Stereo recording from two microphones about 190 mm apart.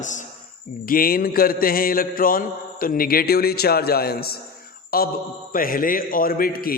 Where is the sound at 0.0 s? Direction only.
40° left (ahead or behind).